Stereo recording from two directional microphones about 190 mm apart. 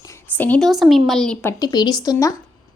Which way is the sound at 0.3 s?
10° left (ahead or behind).